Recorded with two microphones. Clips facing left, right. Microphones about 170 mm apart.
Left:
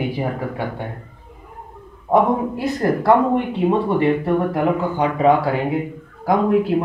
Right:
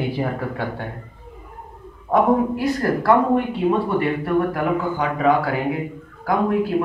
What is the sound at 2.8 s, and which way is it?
Speech, 20° left (ahead or behind).